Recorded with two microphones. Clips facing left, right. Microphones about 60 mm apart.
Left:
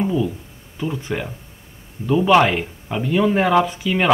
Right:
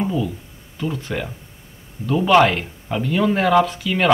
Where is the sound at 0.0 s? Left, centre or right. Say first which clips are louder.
Left 2 dB; centre.